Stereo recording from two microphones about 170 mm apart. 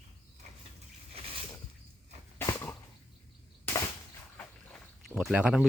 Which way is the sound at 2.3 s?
15° left (ahead or behind).